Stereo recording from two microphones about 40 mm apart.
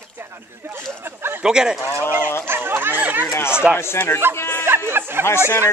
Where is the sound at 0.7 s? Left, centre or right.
Right.